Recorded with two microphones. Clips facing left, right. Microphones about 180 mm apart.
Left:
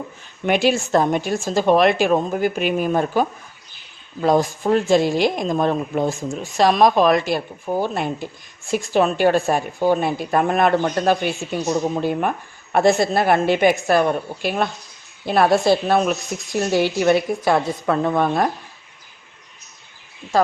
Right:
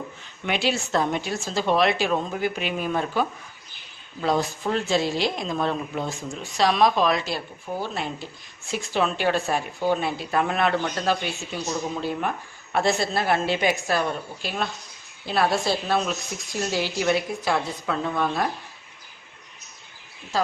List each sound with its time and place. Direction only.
0.4 s speech: 50° left (ahead or behind)